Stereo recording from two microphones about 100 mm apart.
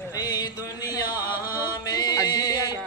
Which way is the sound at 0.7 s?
40° left (ahead or behind).